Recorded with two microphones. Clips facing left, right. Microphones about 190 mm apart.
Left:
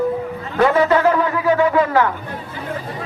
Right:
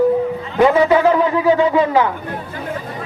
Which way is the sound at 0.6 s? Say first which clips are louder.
Right 2 dB; 15° right (ahead or behind).